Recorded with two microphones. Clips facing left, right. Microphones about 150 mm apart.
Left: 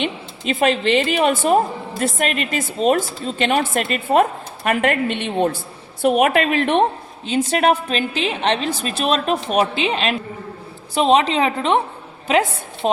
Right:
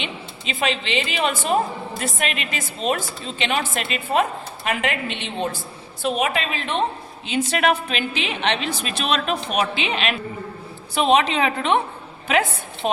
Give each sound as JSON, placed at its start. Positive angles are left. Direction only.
{"t": 0.0, "sound": "a woman's voice", "side_deg": 50}
{"t": 7.3, "sound": "a woman's voice", "side_deg": 40}